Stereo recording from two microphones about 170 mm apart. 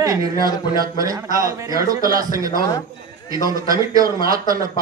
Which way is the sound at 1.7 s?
20° right (ahead or behind).